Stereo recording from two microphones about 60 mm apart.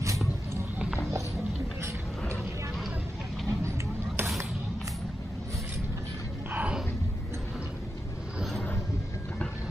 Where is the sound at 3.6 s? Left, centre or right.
Right.